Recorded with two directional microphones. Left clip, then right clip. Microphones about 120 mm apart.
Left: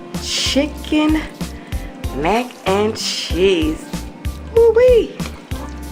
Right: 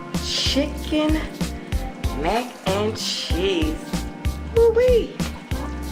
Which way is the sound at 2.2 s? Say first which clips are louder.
Left 6 dB; 30° left (ahead or behind).